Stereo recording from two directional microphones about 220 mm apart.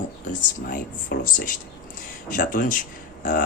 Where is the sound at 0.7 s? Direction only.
40° left (ahead or behind).